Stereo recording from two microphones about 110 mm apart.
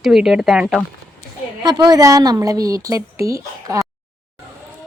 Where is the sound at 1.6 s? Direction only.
40° right (ahead or behind).